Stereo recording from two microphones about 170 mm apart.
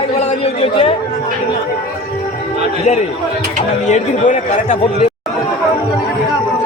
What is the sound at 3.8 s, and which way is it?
Speech, 45° left (ahead or behind).